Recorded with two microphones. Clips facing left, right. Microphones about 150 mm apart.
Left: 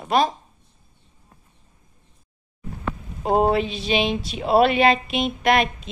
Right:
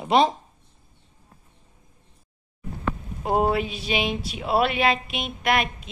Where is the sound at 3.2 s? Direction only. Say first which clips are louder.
Left 3 dB; 25° left (ahead or behind).